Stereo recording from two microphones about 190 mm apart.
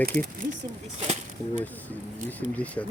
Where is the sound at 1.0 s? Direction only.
35° right (ahead or behind).